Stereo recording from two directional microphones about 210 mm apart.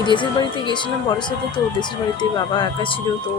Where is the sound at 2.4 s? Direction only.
20° left (ahead or behind).